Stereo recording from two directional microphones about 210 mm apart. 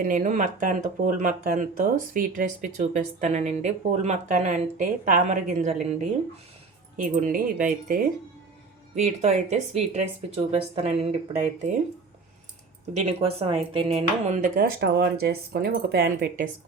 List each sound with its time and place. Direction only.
0.0 s speech: 35° right (ahead or behind)
9.2 s speech: 30° right (ahead or behind)
13.0 s speech: 30° right (ahead or behind)
14.5 s speech: 50° right (ahead or behind)